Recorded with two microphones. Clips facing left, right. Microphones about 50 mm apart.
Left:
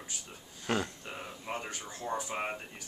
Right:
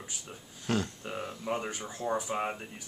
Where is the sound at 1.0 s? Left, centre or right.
Centre.